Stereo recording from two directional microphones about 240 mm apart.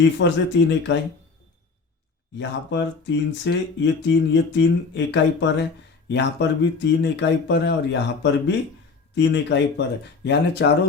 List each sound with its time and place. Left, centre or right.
0.2 s speech: left
2.4 s speech: left